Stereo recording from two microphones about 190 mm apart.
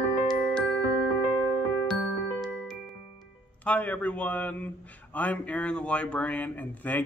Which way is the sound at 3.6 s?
10° left (ahead or behind).